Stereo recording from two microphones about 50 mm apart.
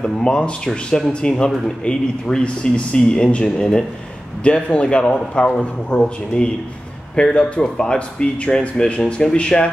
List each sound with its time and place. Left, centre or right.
0.0 s speech: centre